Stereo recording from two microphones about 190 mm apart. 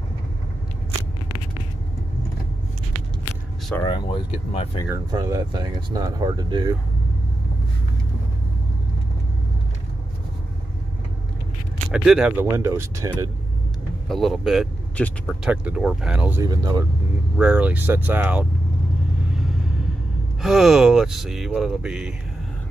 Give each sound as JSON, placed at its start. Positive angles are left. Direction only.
{"t": 3.8, "sound": "speech", "side_deg": 25}
{"t": 4.8, "sound": "speech", "side_deg": -20}
{"t": 11.9, "sound": "speech", "side_deg": -5}
{"t": 14.0, "sound": "speech", "side_deg": 0}
{"t": 15.5, "sound": "speech", "side_deg": -5}
{"t": 16.4, "sound": "speech", "side_deg": -20}
{"t": 17.4, "sound": "speech", "side_deg": -5}
{"t": 20.4, "sound": "speech", "side_deg": 0}